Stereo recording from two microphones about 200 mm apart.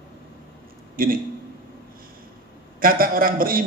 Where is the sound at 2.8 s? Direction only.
45° right (ahead or behind).